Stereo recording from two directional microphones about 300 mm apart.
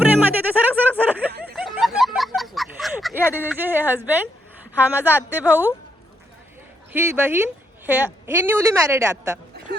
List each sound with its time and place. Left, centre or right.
0.1 s music: centre
1.3 s snicker: right
1.5 s a sound: centre
4.7 s a woman's voice: centre
6.9 s a woman's voice: centre